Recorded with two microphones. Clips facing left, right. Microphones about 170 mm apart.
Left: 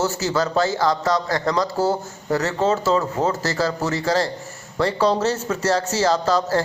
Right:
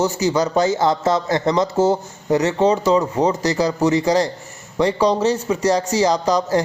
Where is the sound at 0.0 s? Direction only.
15° right (ahead or behind).